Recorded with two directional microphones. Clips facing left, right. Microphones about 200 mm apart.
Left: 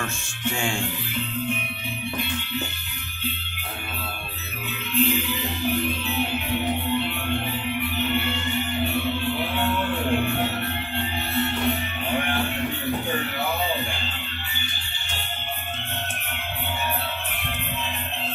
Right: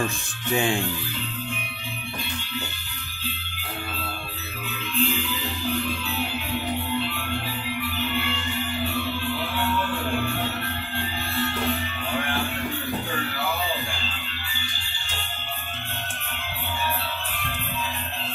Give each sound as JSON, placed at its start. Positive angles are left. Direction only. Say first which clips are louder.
{"t": 0.5, "sound": "speech", "louder": "right 6 dB", "side_deg": -20}
{"t": 4.9, "sound": "music", "louder": "left 3 dB", "side_deg": 25}
{"t": 7.9, "sound": "music", "louder": "left 3 dB", "side_deg": 20}
{"t": 11.3, "sound": "music", "louder": "left 2 dB", "side_deg": 20}